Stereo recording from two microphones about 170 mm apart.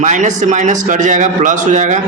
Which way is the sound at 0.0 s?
45° right (ahead or behind).